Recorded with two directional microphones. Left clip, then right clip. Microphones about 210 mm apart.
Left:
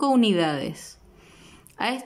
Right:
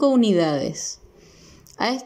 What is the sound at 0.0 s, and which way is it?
Speech, 5° left (ahead or behind).